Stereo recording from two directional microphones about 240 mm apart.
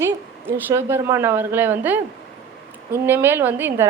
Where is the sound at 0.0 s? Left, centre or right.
Centre.